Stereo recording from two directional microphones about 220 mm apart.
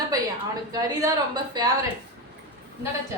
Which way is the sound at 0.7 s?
15° right (ahead or behind).